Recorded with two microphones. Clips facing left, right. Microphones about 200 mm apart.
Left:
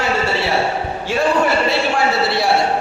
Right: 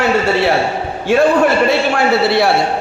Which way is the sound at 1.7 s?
60° right (ahead or behind).